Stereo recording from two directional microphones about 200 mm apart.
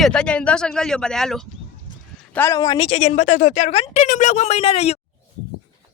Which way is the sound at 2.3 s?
15° left (ahead or behind).